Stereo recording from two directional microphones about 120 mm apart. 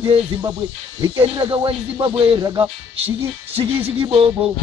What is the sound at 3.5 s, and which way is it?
Speech, 50° right (ahead or behind).